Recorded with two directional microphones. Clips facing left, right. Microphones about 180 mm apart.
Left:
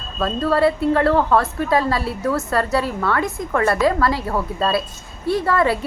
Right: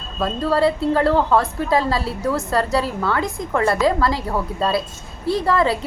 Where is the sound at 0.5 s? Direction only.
25° right (ahead or behind).